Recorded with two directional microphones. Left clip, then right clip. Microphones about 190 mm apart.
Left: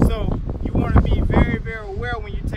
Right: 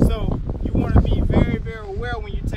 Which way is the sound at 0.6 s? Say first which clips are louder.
Left 1 dB; 10° left (ahead or behind).